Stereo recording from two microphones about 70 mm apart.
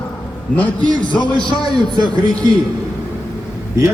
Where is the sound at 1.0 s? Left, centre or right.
Left.